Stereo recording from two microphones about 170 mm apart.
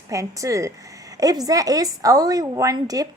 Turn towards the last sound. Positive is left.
turn(degrees=-20)  # may be behind; listen again after turning